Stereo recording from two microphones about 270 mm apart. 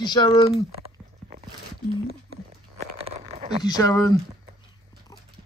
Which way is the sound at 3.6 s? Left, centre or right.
Centre.